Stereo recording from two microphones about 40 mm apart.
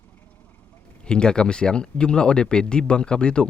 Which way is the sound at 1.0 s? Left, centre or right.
Left.